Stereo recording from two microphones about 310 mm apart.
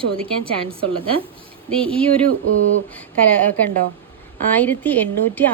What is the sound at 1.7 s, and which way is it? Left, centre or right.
Speech, centre.